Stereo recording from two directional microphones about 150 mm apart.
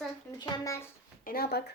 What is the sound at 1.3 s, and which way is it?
Speech, 90° left.